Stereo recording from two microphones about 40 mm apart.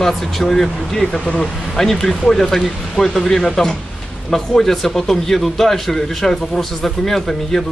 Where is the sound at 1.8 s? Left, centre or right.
Centre.